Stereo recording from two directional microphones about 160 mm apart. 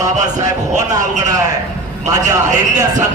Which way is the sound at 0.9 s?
20° right (ahead or behind).